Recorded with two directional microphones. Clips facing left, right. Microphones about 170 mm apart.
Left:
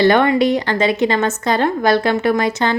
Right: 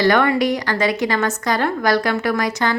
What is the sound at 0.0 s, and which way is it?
Speech, 25° left (ahead or behind).